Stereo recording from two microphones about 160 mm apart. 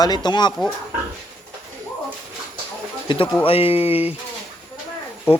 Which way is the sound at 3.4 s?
35° left (ahead or behind).